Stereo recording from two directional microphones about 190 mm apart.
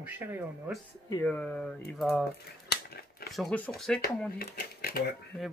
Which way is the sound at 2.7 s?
55° left (ahead or behind).